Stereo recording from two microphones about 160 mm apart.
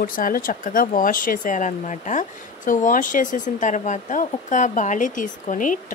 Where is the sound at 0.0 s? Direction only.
60° left (ahead or behind).